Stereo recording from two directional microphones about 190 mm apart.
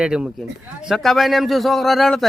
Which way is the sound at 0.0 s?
5° right (ahead or behind).